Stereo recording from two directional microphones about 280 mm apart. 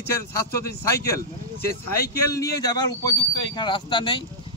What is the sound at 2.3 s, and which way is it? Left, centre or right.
A man's voice, centre.